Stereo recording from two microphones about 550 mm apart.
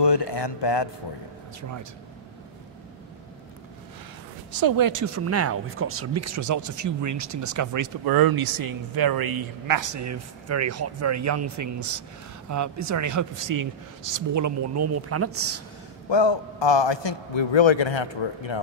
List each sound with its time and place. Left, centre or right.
0.0 s a man's voice: left
1.6 s speech: right
4.5 s speech: right
16.1 s a man's voice: left